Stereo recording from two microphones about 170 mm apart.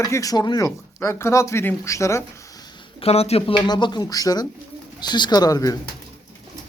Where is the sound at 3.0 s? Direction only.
35° left (ahead or behind); by 5.7 s 20° left (ahead or behind).